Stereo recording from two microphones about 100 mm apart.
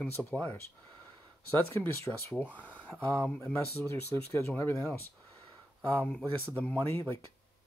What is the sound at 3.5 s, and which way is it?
Speech, 25° left (ahead or behind).